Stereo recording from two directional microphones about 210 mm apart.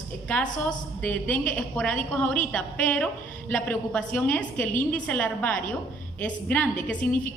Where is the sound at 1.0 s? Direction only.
5° left (ahead or behind).